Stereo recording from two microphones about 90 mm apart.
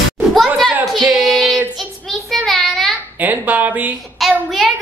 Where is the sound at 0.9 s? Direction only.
5° right (ahead or behind).